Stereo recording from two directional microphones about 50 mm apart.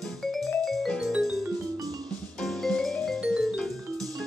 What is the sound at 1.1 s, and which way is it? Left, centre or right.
Music, centre.